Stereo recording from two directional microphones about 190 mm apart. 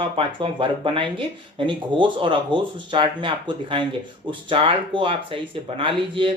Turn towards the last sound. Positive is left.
turn(degrees=-25)  # may be behind; listen again after turning